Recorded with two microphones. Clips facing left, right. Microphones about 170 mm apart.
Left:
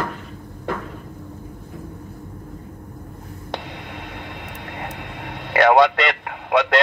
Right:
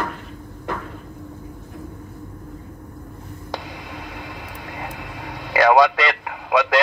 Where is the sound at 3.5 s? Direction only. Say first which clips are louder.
Left 1 dB; 60° left (ahead or behind).